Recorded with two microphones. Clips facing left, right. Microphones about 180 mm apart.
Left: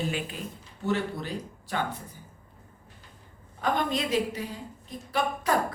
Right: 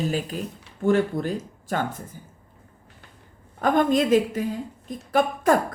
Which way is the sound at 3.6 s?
50° right (ahead or behind).